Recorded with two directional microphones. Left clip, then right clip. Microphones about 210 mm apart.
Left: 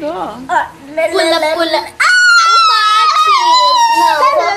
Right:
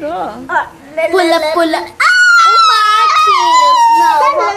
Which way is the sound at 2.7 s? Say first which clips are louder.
Right 1 dB; 35° right (ahead or behind).